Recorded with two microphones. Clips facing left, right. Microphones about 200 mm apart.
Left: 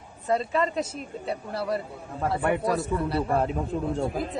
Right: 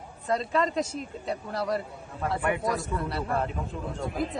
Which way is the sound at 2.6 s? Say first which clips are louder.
Left 4 dB; 30° left (ahead or behind).